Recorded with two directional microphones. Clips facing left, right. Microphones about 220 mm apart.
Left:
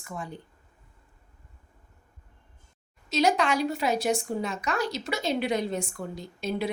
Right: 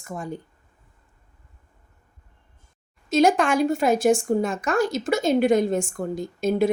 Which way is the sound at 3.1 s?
50° right (ahead or behind).